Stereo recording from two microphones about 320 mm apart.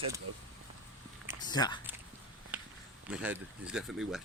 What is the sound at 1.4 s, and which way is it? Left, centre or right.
Speech, centre.